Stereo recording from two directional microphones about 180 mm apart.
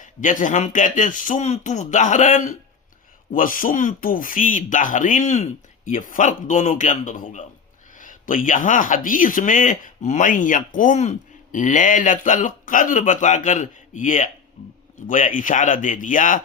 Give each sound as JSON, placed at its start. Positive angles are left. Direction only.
{"t": 0.0, "sound": "speech", "side_deg": 45}